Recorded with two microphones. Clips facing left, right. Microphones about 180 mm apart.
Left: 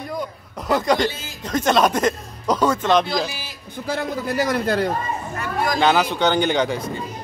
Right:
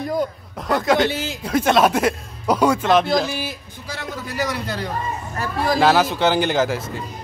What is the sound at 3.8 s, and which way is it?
A man's voice, 50° left (ahead or behind).